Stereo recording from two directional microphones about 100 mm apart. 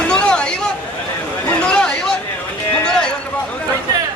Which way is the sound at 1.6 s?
10° left (ahead or behind).